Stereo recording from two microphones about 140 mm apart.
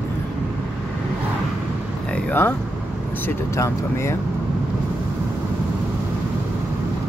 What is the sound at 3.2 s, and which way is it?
Speech, 20° left (ahead or behind).